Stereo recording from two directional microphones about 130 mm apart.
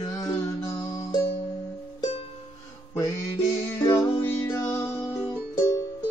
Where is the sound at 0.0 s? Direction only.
25° left (ahead or behind).